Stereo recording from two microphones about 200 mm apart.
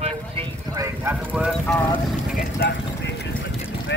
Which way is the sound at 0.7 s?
15° right (ahead or behind).